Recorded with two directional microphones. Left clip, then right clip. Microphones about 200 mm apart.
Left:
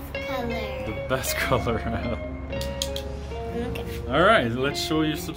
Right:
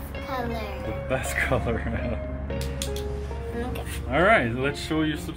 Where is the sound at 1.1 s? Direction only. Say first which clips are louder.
Left 1 dB; 15° left (ahead or behind).